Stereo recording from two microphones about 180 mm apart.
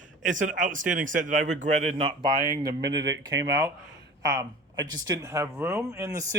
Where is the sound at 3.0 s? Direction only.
85° right.